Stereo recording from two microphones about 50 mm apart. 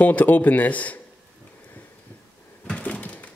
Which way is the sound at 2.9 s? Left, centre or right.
Left.